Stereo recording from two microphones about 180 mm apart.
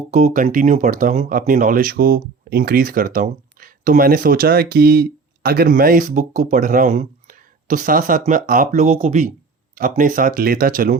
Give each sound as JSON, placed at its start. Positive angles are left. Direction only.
{"t": 0.1, "sound": "speech", "side_deg": -40}